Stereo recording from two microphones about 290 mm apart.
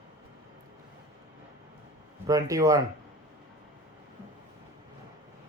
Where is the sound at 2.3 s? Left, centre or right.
Centre.